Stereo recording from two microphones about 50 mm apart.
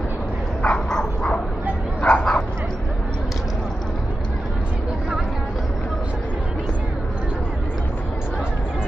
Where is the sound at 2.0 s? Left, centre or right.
Left.